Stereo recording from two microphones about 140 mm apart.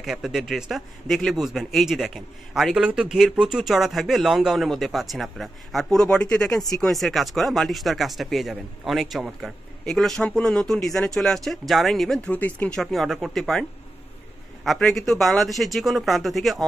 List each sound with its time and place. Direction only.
0.0 s a man's voice: 5° right (ahead or behind)